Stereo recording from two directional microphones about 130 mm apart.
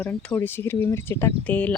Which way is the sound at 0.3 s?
20° left (ahead or behind).